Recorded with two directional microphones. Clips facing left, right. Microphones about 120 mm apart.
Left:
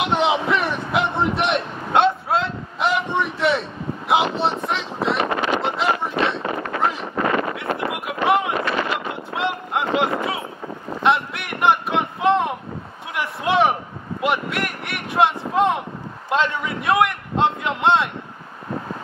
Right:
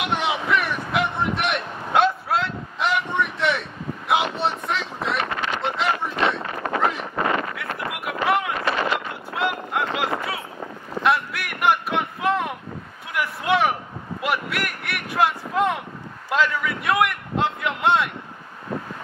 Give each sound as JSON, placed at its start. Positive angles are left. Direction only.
{"t": 0.0, "sound": "vehicle", "side_deg": 25}
{"t": 4.6, "sound": "wind noise", "side_deg": 25}
{"t": 5.6, "sound": "a sound", "side_deg": 25}